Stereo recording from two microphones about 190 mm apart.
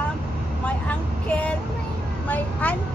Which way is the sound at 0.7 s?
5° left (ahead or behind).